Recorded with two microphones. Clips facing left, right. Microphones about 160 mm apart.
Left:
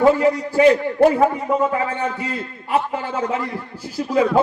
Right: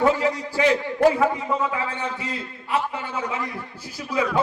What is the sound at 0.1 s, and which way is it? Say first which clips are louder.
A man's voice: left 6 dB; 45° left (ahead or behind).